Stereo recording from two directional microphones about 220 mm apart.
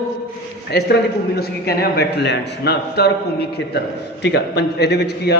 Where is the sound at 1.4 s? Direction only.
45° left (ahead or behind).